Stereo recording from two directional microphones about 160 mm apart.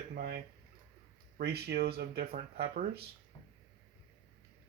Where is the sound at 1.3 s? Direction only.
90° right; by 3.0 s 70° right (ahead or behind).